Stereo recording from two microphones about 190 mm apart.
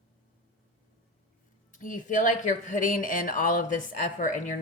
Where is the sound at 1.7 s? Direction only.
45° left (ahead or behind).